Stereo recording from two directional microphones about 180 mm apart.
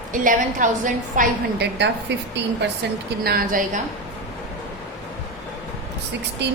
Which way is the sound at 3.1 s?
60° right (ahead or behind).